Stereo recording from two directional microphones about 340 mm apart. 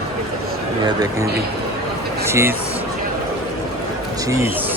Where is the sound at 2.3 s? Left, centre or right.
Centre.